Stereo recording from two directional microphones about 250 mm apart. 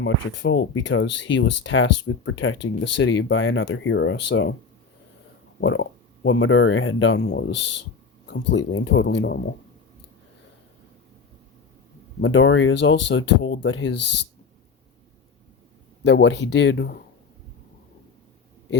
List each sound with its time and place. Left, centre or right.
0.0 s speech: left
5.5 s speech: left
12.2 s speech: left
16.0 s speech: left